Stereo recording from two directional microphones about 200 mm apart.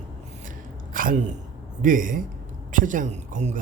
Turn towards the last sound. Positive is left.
turn(degrees=-35)  # may be behind; listen again after turning